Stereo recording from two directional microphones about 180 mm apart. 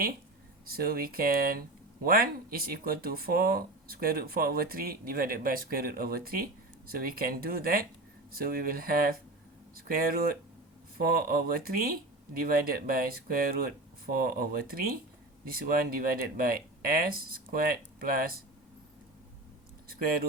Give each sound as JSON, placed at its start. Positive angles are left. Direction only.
{"t": 0.6, "sound": "speech", "side_deg": -55}
{"t": 19.9, "sound": "speech", "side_deg": -55}